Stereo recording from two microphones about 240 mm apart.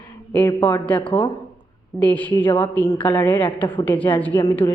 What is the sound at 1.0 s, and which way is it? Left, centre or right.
Speech, left.